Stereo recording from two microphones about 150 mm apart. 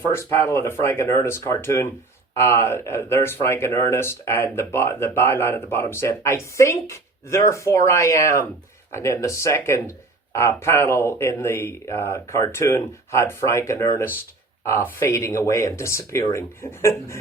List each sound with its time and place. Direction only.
0.0 s speech: 15° left (ahead or behind)